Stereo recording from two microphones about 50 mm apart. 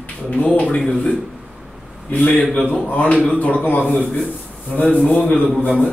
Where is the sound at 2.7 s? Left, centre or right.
Left.